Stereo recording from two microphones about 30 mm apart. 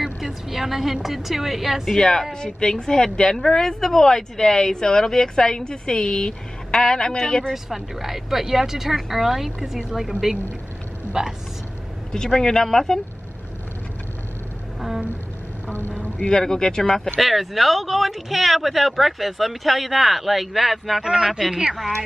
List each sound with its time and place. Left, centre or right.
0.2 s speech: centre
2.0 s speech: centre
7.5 s speech: centre
12.1 s speech: centre
16.3 s speech: left
17.2 s speech: centre
21.0 s speech: right
21.3 s speech: centre